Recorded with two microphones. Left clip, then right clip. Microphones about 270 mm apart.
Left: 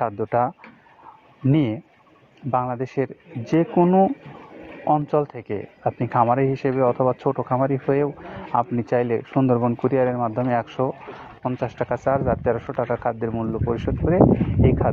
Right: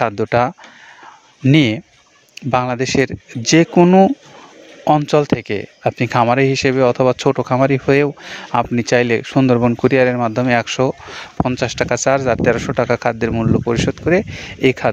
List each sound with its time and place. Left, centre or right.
0.0 s speech: right
11.9 s speech: right